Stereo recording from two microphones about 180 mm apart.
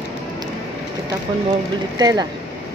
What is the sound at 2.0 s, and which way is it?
Speech, 20° right (ahead or behind).